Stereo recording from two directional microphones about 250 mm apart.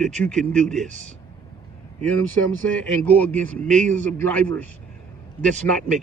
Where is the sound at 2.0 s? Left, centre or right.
Centre.